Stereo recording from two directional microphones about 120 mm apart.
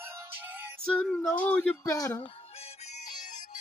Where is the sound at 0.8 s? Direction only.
10° left (ahead or behind).